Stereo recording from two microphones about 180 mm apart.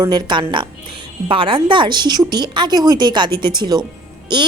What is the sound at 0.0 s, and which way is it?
A woman's voice, 25° right (ahead or behind).